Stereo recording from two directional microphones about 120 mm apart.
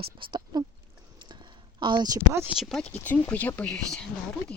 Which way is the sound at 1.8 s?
40° right (ahead or behind).